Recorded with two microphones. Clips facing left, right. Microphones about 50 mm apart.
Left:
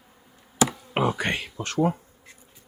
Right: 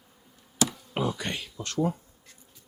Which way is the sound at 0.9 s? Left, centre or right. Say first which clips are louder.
Left 8 dB; left.